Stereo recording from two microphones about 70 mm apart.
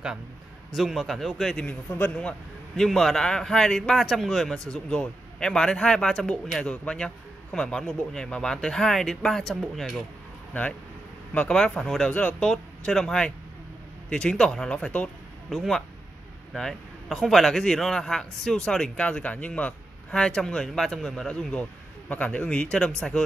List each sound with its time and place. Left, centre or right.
0.7 s speech: centre
1.7 s speech: left
2.7 s a man's voice: centre
11.5 s speech: centre
12.1 s a man's voice: centre
15.5 s a man's voice: centre